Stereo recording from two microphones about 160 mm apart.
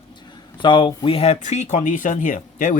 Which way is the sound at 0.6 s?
30° left (ahead or behind).